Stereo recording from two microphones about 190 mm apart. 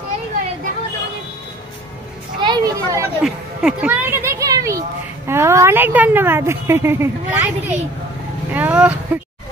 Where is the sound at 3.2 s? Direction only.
5° right (ahead or behind).